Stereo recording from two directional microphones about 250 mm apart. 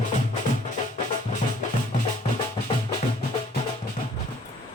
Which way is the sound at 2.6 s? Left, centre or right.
Left.